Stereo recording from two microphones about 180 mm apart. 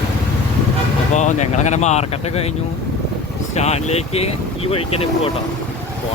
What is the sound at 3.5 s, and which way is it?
Speech, 35° left (ahead or behind).